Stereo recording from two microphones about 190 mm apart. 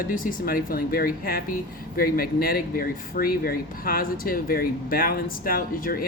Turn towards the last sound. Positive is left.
turn(degrees=50)  # may be behind; listen again after turning